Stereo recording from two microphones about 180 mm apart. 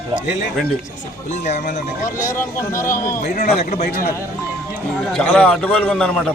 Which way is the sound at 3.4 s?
40° left (ahead or behind).